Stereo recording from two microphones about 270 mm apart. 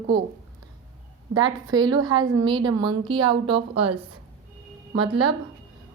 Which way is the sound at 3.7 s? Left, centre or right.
Right.